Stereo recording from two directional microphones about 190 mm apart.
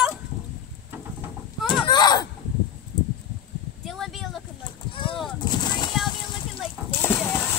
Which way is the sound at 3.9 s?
Centre (ahead or behind).